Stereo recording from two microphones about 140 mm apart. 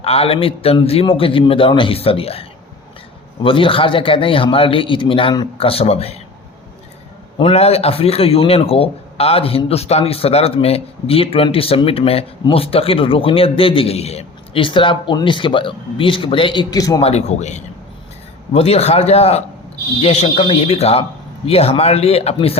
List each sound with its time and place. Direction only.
0.0 s a man's voice: 45° left (ahead or behind)
7.3 s speech: 45° left (ahead or behind); by 17.0 s 25° left (ahead or behind)
17.0 s speech: 50° left (ahead or behind)